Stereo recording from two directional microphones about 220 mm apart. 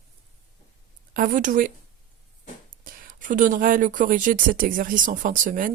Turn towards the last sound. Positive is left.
turn(degrees=-35)  # may be behind; listen again after turning